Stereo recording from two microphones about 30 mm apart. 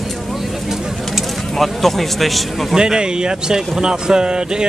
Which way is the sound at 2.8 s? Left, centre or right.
Right.